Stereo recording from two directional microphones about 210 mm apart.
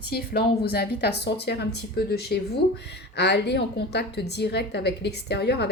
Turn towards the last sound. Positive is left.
turn(degrees=50)  # may be behind; listen again after turning